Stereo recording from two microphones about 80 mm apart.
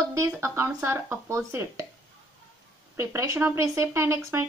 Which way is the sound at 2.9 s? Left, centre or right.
Right.